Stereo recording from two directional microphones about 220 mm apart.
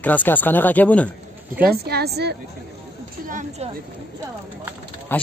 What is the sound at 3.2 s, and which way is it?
Speech, 35° right (ahead or behind).